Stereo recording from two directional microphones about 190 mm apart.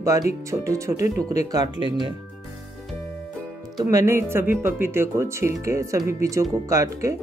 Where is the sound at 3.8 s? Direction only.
20° right (ahead or behind).